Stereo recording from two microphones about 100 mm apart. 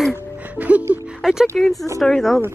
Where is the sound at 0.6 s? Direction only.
15° right (ahead or behind).